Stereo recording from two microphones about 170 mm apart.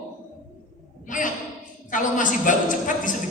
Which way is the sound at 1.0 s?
50° left (ahead or behind).